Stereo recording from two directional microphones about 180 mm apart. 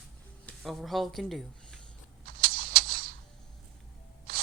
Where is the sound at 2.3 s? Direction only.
55° right (ahead or behind).